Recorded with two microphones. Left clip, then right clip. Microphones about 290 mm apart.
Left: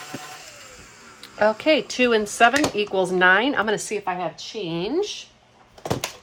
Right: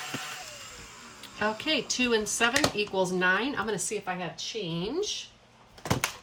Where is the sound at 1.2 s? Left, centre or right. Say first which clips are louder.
Left 10 dB; centre.